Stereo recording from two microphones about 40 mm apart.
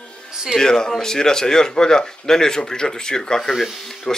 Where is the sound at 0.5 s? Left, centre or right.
Centre.